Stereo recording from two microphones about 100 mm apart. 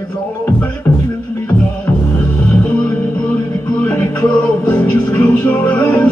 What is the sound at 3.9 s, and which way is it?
Music, 15° left (ahead or behind).